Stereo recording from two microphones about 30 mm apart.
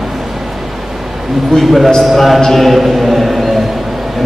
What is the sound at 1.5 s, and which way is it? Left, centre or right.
Speech, centre.